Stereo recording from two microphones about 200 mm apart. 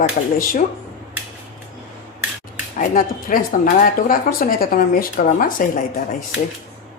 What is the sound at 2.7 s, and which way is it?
Speech, 45° left (ahead or behind).